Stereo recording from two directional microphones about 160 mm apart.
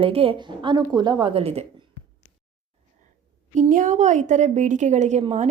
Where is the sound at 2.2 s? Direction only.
15° left (ahead or behind).